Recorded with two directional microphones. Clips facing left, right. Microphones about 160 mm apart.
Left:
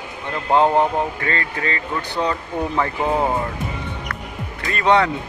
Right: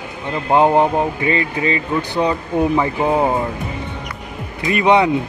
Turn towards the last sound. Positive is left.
turn(degrees=-15)  # may be behind; listen again after turning